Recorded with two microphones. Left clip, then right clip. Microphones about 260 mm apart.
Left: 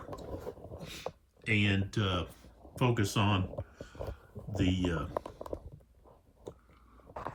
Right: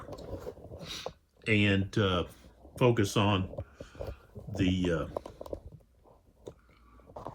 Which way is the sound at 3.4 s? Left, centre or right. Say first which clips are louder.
Even; right.